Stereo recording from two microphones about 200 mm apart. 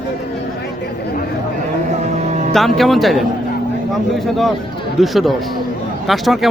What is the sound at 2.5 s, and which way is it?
A man's voice, centre (ahead or behind).